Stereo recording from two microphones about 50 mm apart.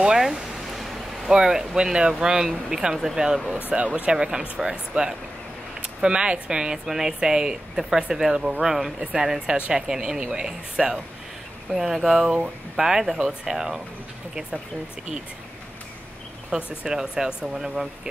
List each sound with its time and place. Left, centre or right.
0.0 s a sound: centre
1.3 s speech: centre
16.4 s speech: centre